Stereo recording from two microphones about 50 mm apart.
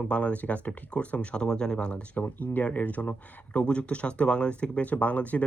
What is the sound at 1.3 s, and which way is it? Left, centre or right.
Speech, centre.